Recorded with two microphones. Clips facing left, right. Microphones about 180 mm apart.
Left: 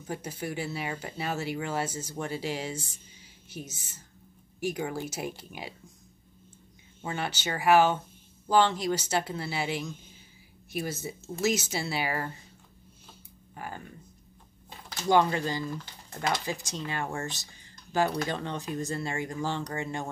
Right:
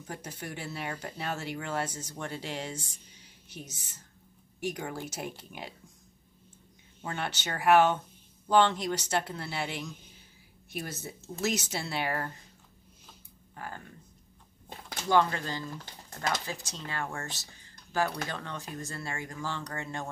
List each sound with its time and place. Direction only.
0.0 s speech: 5° left (ahead or behind)
7.0 s speech: 5° left (ahead or behind)
13.6 s speech: 10° left (ahead or behind)
15.0 s speech: 15° left (ahead or behind)